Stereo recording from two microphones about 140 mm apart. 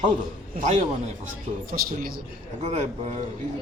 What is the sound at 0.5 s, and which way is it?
Speech, 60° right (ahead or behind).